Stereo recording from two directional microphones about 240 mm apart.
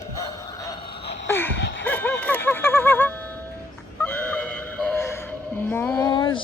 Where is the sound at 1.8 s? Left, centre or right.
Centre.